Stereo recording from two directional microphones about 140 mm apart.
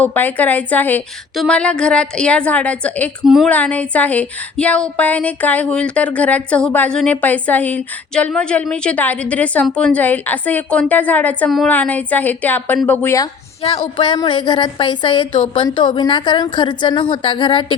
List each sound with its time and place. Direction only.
0.0 s a woman's voice: 10° left (ahead or behind)
3.2 s speech: centre (ahead or behind)
3.5 s a woman's voice: 10° left (ahead or behind)
13.6 s a sound: 45° left (ahead or behind)
13.8 s a woman's voice: 35° left (ahead or behind)